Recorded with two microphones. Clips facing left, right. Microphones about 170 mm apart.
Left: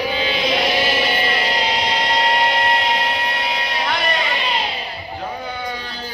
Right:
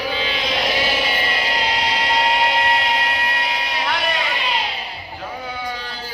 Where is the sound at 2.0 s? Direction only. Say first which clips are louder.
Even; 5° right (ahead or behind).